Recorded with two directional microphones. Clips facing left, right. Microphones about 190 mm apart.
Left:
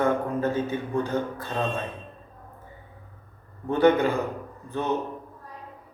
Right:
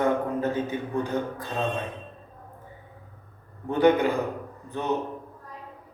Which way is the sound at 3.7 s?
15° right (ahead or behind).